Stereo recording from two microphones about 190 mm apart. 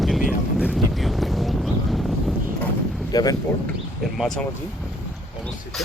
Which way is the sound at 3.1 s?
20° left (ahead or behind).